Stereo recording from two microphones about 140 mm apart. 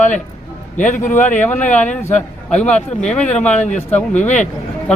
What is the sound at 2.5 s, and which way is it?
Speech, 55° left (ahead or behind).